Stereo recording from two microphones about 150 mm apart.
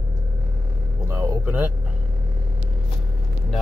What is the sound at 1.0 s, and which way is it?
Vehicle, 20° right (ahead or behind).